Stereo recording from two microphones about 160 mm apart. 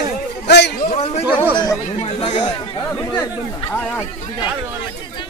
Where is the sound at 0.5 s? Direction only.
90° left.